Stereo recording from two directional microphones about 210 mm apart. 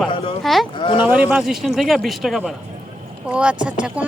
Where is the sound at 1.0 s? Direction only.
5° right (ahead or behind).